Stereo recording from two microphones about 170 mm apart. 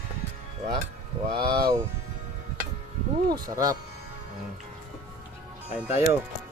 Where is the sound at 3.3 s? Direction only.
20° right (ahead or behind).